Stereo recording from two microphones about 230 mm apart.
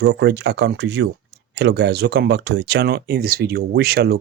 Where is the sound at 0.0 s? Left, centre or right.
Right.